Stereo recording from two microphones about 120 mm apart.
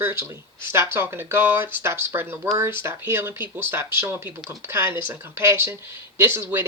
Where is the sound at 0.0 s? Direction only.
20° right (ahead or behind).